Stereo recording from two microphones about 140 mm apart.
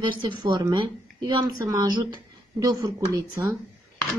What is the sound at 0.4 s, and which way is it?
A woman's voice, 30° right (ahead or behind).